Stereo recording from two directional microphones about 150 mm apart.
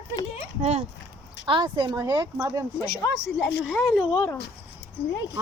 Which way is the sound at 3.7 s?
5° left (ahead or behind).